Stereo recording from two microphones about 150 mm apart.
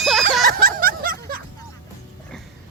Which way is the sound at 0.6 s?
75° right (ahead or behind).